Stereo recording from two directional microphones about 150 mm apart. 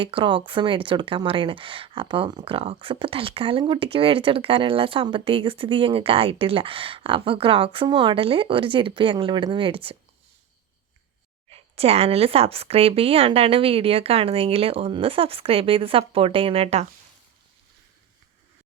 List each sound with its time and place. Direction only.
0.0 s speech: 35° right (ahead or behind)
11.5 s speech: 40° right (ahead or behind)